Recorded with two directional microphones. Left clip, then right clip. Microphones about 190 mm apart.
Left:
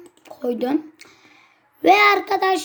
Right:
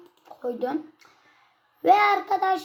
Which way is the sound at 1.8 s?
45° left (ahead or behind).